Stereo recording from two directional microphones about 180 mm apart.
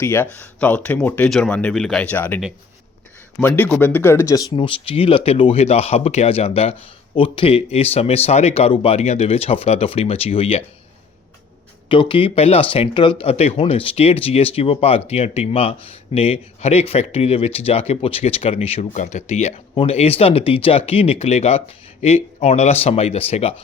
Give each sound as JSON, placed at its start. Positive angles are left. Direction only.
{"t": 0.0, "sound": "speech", "side_deg": 15}
{"t": 3.4, "sound": "speech", "side_deg": 10}
{"t": 11.9, "sound": "speech", "side_deg": 30}